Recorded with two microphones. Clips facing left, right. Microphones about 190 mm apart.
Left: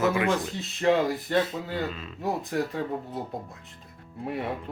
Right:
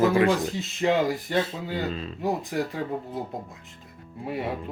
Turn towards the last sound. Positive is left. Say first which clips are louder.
# right 1 dB
turn(degrees=0)  # may be behind; listen again after turning